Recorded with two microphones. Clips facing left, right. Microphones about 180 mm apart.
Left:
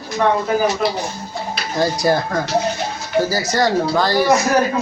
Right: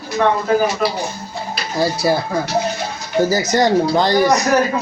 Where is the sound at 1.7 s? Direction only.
5° right (ahead or behind).